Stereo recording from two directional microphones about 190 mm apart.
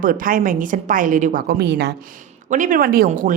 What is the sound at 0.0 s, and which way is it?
Speech, 45° right (ahead or behind).